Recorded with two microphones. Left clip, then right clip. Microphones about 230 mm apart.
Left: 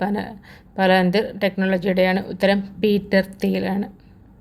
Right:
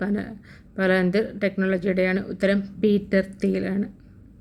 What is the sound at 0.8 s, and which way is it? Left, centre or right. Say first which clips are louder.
A woman's voice: left 4 dB; centre.